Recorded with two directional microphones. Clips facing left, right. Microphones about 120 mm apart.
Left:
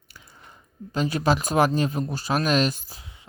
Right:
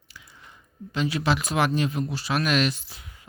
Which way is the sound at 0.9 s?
45° left (ahead or behind).